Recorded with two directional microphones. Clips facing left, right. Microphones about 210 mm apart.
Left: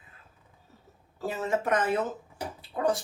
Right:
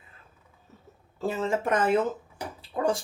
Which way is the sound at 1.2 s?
25° right (ahead or behind).